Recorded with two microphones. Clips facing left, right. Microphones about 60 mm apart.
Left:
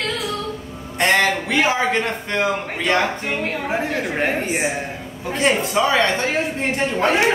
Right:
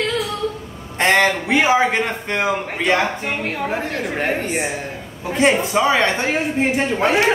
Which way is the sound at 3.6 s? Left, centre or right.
Centre.